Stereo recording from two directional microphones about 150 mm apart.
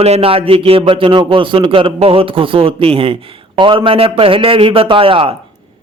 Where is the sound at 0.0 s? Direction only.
40° right (ahead or behind).